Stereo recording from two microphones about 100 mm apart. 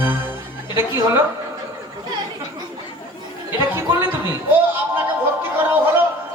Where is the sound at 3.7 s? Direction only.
20° right (ahead or behind).